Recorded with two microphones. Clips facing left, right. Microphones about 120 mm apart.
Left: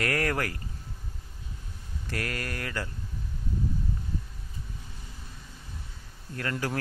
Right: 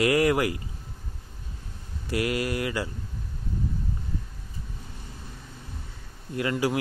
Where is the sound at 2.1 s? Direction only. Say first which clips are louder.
Right 8 dB; 15° right (ahead or behind).